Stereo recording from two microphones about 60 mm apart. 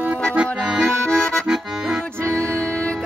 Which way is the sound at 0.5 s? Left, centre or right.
Centre.